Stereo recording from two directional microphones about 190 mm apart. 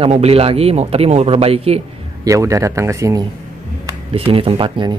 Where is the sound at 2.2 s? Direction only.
15° right (ahead or behind).